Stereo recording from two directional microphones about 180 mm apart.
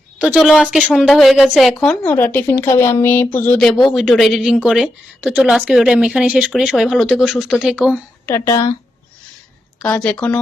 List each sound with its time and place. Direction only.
0.2 s a woman's voice: centre (ahead or behind)
2.0 s a woman's voice: 10° left (ahead or behind); by 7.9 s 5° right (ahead or behind)
8.3 s a woman's voice: 15° left (ahead or behind)
9.8 s a woman's voice: 5° left (ahead or behind)